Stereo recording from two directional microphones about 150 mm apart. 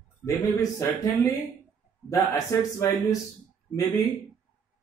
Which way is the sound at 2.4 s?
20° left (ahead or behind).